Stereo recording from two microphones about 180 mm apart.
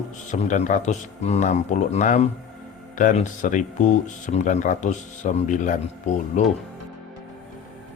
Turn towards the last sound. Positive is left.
turn(degrees=45)  # may be behind; listen again after turning